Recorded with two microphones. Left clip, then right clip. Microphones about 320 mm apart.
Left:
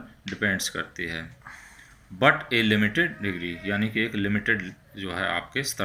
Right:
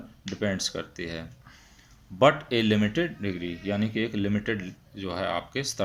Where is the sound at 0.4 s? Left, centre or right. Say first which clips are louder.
Left 3 dB; right.